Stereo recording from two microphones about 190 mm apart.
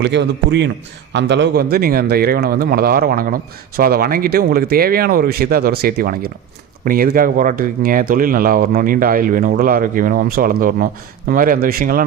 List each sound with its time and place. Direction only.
0.0 s a man's voice: 65° right (ahead or behind); by 12.0 s 50° right (ahead or behind)